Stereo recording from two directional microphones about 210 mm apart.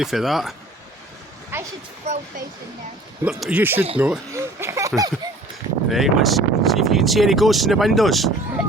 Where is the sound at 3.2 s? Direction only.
5° right (ahead or behind).